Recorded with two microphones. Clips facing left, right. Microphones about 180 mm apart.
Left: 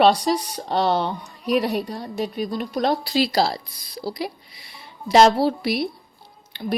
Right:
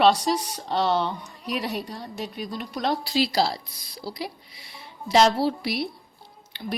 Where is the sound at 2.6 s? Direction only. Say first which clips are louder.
Left 4 dB; 40° left (ahead or behind).